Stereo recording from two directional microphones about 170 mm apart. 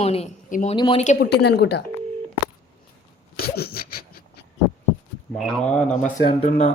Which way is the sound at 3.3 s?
65° left (ahead or behind).